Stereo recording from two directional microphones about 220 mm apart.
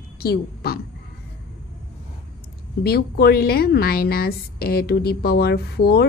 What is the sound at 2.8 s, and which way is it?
A woman's voice, 45° left (ahead or behind).